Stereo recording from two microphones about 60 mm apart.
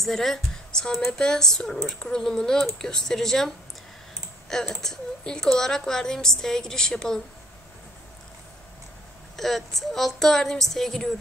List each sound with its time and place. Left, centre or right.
0.0 s a woman's voice: centre
9.4 s a woman's voice: centre